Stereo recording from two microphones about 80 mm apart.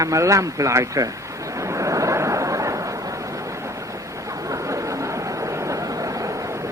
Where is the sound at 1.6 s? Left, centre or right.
Right.